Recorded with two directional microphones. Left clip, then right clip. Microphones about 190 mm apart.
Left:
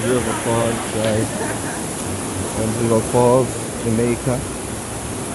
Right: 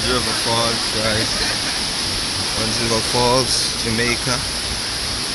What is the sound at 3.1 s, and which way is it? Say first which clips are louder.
Speech: left 3 dB; 30° right (ahead or behind).